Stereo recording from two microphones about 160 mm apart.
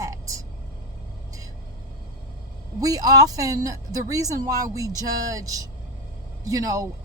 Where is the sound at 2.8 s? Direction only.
20° right (ahead or behind).